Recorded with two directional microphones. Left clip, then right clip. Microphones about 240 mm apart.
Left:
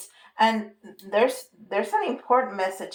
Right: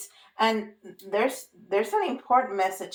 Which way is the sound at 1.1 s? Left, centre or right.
Left.